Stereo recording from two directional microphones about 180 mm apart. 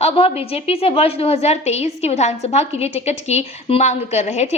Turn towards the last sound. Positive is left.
turn(degrees=40)  # may be behind; listen again after turning